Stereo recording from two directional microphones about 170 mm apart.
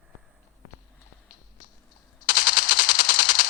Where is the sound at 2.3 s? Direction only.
55° left (ahead or behind).